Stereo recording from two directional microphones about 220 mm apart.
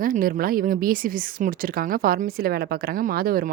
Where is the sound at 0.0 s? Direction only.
40° right (ahead or behind).